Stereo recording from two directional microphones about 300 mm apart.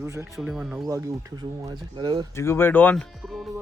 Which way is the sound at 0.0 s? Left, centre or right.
Centre.